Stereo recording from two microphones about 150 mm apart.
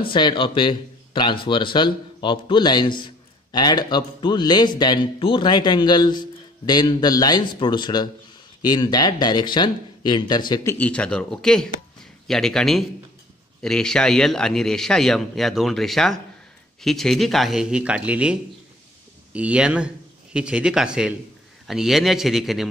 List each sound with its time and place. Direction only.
0.0 s a man's voice: 35° left (ahead or behind)
10.9 s a man's voice: 5° left (ahead or behind)